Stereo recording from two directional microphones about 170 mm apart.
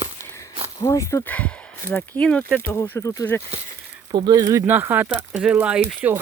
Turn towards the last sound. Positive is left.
turn(degrees=-5)  # may be behind; listen again after turning